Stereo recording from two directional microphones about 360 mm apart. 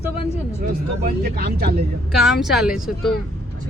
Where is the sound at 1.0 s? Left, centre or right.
Right.